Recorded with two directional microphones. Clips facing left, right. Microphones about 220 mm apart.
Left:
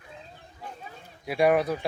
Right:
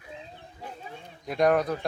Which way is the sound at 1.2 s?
10° left (ahead or behind).